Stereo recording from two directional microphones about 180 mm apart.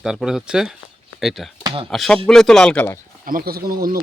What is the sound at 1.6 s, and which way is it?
Speech, 30° right (ahead or behind).